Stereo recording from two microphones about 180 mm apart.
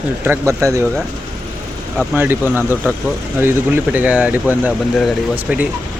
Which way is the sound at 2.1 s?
10° right (ahead or behind).